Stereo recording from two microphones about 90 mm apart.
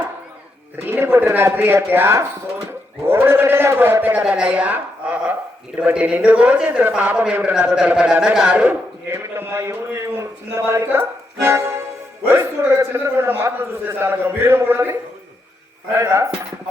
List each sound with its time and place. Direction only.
0.9 s a man's voice: 25° right (ahead or behind)
9.1 s a man's voice: 30° right (ahead or behind)
11.4 s music: 30° right (ahead or behind)
12.4 s a man's voice: 30° right (ahead or behind)
16.0 s a man's voice: 30° right (ahead or behind)